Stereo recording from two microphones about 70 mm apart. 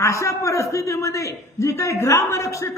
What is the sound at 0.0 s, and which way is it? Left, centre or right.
A man's voice, left.